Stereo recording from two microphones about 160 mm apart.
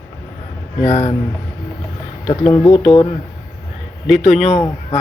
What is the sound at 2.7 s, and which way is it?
Speech, 35° left (ahead or behind).